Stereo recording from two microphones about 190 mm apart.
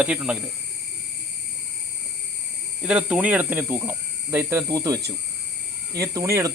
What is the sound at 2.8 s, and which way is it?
Speech, 5° right (ahead or behind).